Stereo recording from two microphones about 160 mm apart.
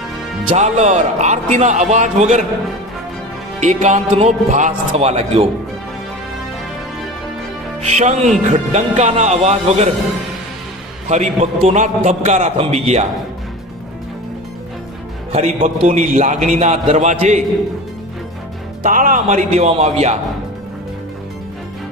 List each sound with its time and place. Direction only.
0.5 s a man's voice: 45° right (ahead or behind)
3.6 s a man's voice: 45° right (ahead or behind)
7.8 s a man's voice: 45° right (ahead or behind)
11.1 s a man's voice: 45° right (ahead or behind)
15.3 s a man's voice: 40° right (ahead or behind)
18.8 s a man's voice: 55° right (ahead or behind)